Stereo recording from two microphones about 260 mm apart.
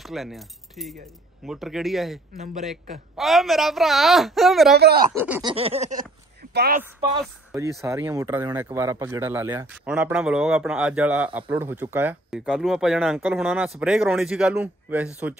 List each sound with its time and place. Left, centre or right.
0.0 s a man's voice: centre
4.7 s speech: right
5.2 s speech: centre
5.5 s a sound: right
6.5 s speech: right
7.2 s a man's voice: centre